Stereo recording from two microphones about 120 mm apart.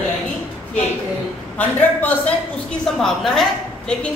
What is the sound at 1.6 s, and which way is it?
Speech, 15° left (ahead or behind).